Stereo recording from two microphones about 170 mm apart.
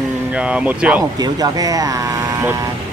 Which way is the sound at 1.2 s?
20° right (ahead or behind).